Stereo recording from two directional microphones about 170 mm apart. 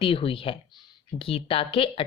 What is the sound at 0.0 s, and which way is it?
Speech, 30° left (ahead or behind).